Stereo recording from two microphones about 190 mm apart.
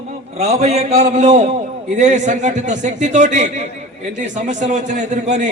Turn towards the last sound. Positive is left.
turn(degrees=-40)  # may be behind; listen again after turning